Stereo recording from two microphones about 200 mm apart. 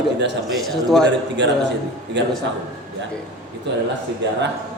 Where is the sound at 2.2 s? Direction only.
60° right (ahead or behind).